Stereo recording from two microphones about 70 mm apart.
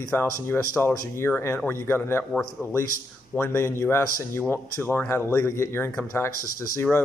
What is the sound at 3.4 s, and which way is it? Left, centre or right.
A man's voice, left.